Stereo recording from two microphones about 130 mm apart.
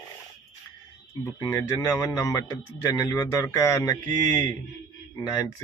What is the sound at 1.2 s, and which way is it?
Speech, 25° left (ahead or behind).